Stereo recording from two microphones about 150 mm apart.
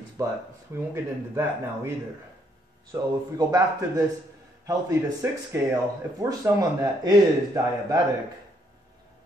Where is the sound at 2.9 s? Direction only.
25° right (ahead or behind).